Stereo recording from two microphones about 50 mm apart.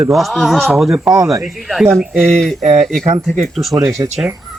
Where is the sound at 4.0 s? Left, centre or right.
Right.